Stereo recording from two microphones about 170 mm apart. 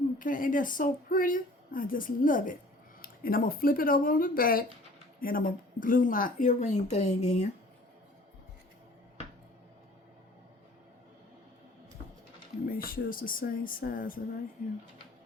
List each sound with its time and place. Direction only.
0.2 s a woman's voice: 50° left (ahead or behind)
12.6 s speech: 55° left (ahead or behind)